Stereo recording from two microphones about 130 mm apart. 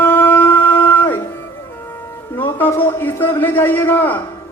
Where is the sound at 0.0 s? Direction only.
15° left (ahead or behind).